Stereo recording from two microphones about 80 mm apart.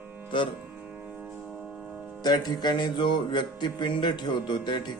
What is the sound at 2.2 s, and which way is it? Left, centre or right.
A man's voice, left.